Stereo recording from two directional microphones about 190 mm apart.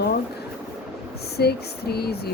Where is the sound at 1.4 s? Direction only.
55° left (ahead or behind).